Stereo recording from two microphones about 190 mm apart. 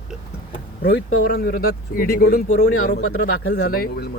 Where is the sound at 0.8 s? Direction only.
55° left (ahead or behind).